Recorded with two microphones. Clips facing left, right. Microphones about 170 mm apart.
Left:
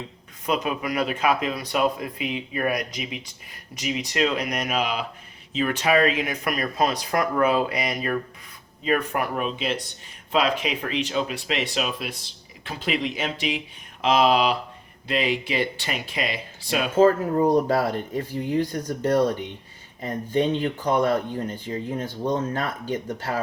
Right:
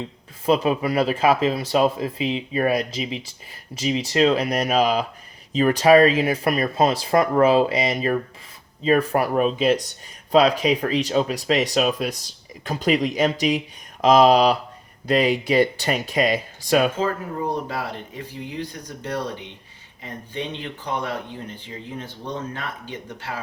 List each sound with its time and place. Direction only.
0.4 s speech: 30° right (ahead or behind); by 16.9 s 45° right (ahead or behind)
17.0 s speech: 40° left (ahead or behind)